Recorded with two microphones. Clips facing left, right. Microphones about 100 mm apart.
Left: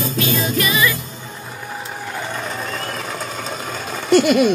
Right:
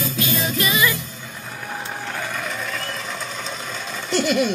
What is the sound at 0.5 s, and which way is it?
Music, 25° right (ahead or behind).